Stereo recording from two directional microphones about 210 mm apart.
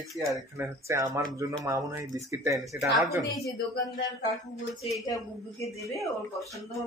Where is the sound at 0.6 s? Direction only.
15° right (ahead or behind).